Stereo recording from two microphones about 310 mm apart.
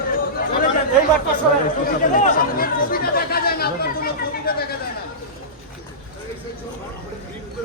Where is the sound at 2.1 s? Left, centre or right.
Left.